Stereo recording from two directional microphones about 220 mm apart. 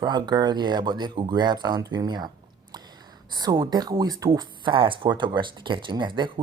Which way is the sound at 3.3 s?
20° right (ahead or behind).